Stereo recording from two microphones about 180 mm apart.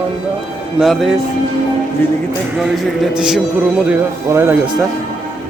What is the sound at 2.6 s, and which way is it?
Speech, 5° right (ahead or behind).